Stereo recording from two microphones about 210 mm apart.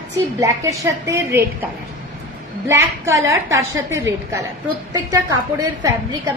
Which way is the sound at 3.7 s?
15° right (ahead or behind).